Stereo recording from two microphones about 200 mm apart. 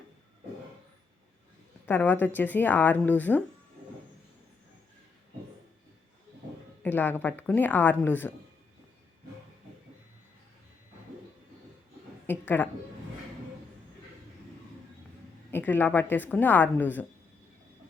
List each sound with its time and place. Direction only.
1.9 s a woman's voice: 10° left (ahead or behind)
6.8 s a woman's voice: 10° left (ahead or behind)
12.2 s a sound: 10° left (ahead or behind)
15.5 s a woman's voice: 10° left (ahead or behind)